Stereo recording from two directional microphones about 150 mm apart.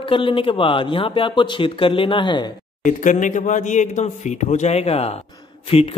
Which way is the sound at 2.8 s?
60° left (ahead or behind).